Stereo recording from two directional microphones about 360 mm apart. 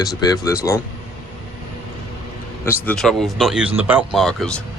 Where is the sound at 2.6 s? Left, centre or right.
Centre.